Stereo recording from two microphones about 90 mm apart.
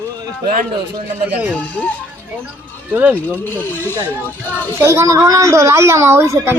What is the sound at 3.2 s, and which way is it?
Speech, 20° left (ahead or behind).